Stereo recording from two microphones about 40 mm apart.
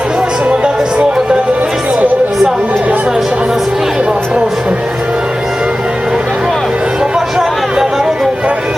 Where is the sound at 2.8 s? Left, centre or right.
Right.